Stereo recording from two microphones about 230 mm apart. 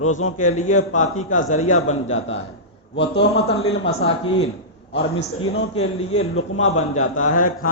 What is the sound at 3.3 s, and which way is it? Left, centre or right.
A man's voice, left.